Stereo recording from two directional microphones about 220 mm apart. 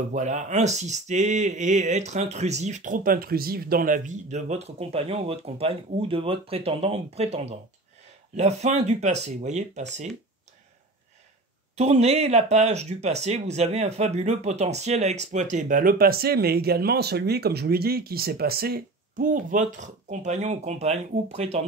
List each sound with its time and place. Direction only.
0.1 s speech: 35° right (ahead or behind)
11.7 s speech: 30° right (ahead or behind)